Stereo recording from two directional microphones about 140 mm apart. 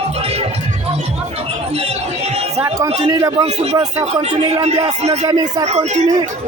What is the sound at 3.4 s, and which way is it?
Speech, 50° right (ahead or behind).